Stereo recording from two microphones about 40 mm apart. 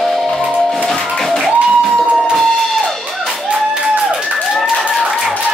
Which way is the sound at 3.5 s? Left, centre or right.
Right.